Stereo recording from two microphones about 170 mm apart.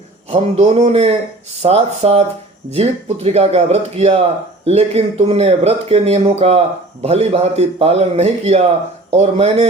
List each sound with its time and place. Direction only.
0.3 s speech: 40° right (ahead or behind)